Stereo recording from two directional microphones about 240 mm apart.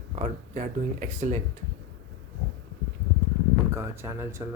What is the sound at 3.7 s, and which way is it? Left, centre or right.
Speech, centre.